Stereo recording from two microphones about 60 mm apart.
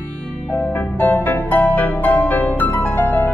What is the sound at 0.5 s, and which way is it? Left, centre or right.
Music, left.